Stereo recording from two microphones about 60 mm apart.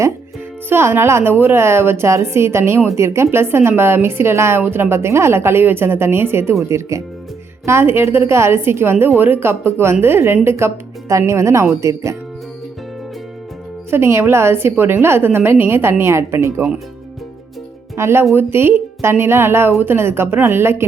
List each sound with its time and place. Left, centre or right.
0.7 s a woman's voice: right
13.9 s a woman's voice: right
17.9 s a woman's voice: right